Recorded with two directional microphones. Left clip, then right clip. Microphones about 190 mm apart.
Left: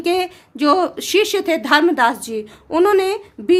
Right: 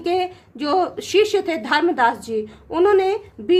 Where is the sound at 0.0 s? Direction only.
30° left (ahead or behind).